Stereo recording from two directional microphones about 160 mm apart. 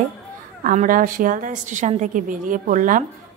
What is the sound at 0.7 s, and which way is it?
A woman's voice, 55° right (ahead or behind).